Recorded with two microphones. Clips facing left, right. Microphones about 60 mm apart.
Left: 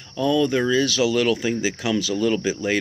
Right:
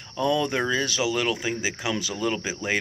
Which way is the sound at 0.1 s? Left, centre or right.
Right.